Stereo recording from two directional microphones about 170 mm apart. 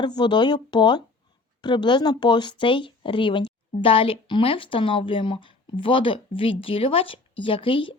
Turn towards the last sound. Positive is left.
turn(degrees=30)  # may be behind; listen again after turning